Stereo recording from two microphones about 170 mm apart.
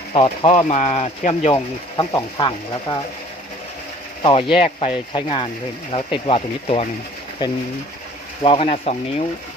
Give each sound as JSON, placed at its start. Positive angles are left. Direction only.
{"t": 0.1, "sound": "speech", "side_deg": 35}
{"t": 1.5, "sound": "speech", "side_deg": 20}
{"t": 4.2, "sound": "speech", "side_deg": 30}
{"t": 8.4, "sound": "speech", "side_deg": 35}